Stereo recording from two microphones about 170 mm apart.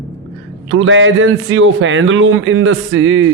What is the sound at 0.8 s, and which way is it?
A man's voice, 90° right.